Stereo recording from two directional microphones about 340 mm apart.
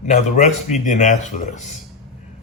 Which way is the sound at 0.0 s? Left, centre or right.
Left.